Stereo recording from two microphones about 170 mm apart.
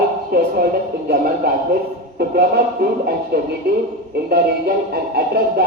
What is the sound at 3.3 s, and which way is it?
Speech, 70° right (ahead or behind).